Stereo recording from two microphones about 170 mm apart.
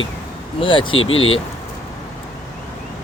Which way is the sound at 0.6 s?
30° left (ahead or behind).